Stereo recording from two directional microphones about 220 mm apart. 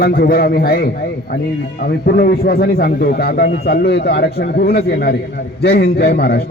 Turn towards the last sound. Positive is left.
turn(degrees=45)  # may be behind; listen again after turning